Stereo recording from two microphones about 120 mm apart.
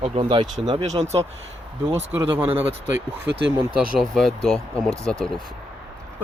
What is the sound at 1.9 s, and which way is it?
Speech, 15° right (ahead or behind).